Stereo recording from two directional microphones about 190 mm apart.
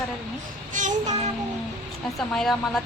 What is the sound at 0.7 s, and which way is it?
Child singing, 40° right (ahead or behind).